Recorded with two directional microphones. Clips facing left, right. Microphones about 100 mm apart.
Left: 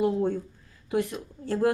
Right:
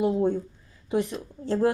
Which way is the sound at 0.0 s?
20° right (ahead or behind).